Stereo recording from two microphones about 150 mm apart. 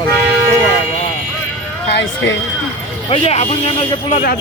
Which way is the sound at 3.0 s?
40° left (ahead or behind).